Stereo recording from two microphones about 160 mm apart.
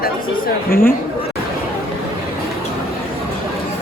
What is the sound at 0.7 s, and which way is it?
Speech, 65° left (ahead or behind).